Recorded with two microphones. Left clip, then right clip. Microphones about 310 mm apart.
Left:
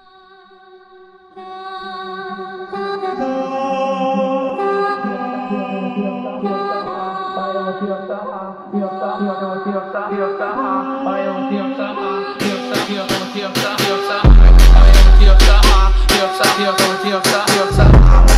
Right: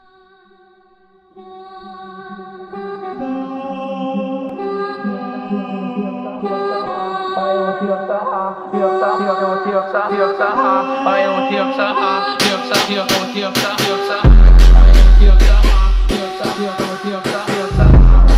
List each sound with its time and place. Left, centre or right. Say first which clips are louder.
2.7 s music: left 5 dB; left
4.6 s music: left 5 dB; left; by 9.0 s right
9.2 s music: right 5 dB; right; by 15.7 s centre
16.1 s music: left 7 dB; left